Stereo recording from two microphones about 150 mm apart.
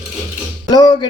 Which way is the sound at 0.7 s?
30° left (ahead or behind).